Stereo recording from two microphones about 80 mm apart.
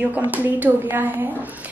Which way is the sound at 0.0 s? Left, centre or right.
Right.